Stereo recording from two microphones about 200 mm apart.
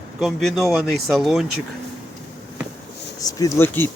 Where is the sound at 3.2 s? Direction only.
15° left (ahead or behind).